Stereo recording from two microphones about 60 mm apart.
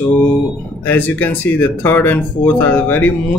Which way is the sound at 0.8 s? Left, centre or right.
Left.